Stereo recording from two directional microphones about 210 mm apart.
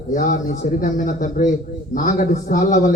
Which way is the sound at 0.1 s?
40° left (ahead or behind).